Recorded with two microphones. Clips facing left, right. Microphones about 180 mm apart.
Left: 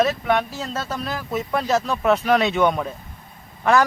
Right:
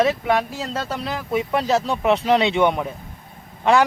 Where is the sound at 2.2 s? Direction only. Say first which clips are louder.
Right 1 dB; 20° right (ahead or behind).